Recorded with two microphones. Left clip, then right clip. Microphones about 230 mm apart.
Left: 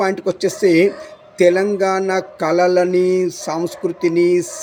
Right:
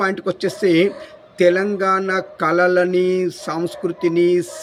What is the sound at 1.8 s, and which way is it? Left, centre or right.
Speech, right.